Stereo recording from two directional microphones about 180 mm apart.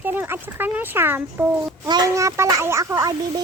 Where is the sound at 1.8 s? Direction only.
20° right (ahead or behind).